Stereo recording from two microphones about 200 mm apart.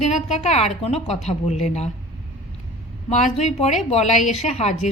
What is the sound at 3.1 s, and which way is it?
A woman's voice, 35° left (ahead or behind).